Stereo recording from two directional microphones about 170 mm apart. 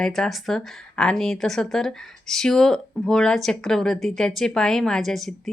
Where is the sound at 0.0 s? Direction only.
Centre (ahead or behind).